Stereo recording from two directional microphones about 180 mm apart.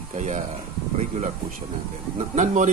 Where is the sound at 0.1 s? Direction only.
40° right (ahead or behind).